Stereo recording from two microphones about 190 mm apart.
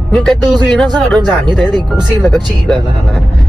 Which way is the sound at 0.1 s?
Centre (ahead or behind).